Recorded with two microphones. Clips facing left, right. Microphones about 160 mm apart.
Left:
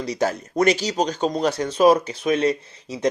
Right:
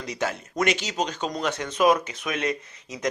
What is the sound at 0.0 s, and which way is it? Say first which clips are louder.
Speech: left 6 dB; 35° left (ahead or behind).